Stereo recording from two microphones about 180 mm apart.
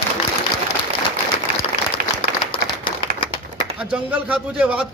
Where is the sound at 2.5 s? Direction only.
25° left (ahead or behind).